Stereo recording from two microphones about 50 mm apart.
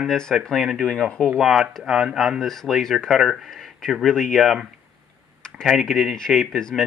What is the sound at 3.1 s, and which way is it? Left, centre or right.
Speech, centre.